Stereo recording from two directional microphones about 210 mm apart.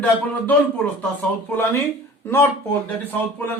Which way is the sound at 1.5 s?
10° left (ahead or behind).